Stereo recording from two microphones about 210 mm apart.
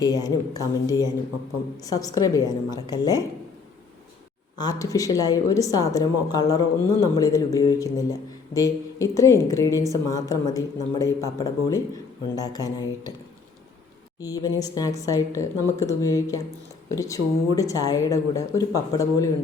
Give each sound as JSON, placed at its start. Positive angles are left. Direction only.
{"t": 0.0, "sound": "a woman's voice", "side_deg": 20}
{"t": 4.5, "sound": "a woman's voice", "side_deg": 20}
{"t": 14.2, "sound": "a woman's voice", "side_deg": 15}